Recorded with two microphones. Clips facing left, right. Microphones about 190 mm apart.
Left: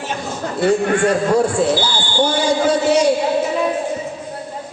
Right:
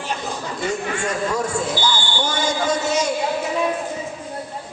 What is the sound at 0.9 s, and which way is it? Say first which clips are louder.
Speech: left 9 dB; 55° left (ahead or behind).